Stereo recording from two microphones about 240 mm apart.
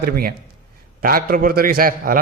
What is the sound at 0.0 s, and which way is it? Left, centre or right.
A man's voice, right.